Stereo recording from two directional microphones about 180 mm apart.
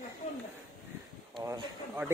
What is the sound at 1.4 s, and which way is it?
Speech, 25° right (ahead or behind).